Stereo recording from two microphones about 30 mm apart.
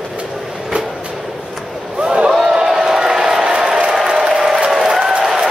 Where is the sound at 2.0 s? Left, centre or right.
Right.